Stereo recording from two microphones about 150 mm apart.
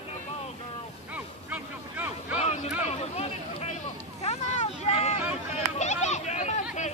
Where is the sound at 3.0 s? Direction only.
45° left (ahead or behind).